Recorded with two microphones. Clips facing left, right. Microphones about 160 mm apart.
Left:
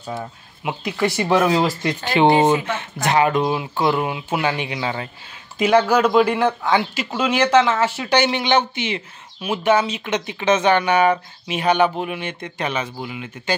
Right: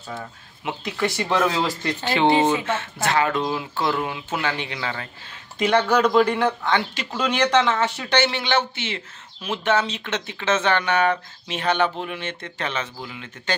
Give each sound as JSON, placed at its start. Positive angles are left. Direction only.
{"t": 0.7, "sound": "speech", "side_deg": 10}
{"t": 5.6, "sound": "speech", "side_deg": 5}